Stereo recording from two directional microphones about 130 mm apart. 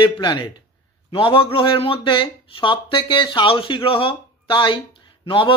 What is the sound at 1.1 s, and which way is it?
Speech, 45° left (ahead or behind).